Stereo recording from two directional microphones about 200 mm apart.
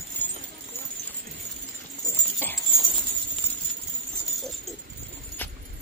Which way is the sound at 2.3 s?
10° left (ahead or behind).